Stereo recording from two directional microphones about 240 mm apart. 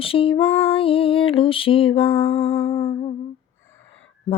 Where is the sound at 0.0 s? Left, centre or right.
Left.